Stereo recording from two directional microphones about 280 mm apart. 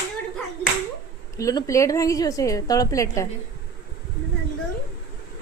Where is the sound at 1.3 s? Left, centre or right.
Centre.